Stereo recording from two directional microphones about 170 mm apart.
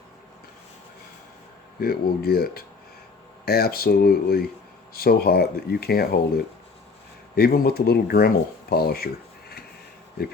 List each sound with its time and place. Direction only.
1.8 s speech: 65° left (ahead or behind)